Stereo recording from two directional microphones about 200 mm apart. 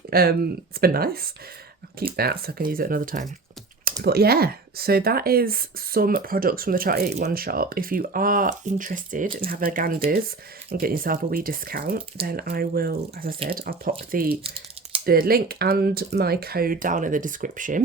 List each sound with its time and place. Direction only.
0.1 s speech: 50° right (ahead or behind)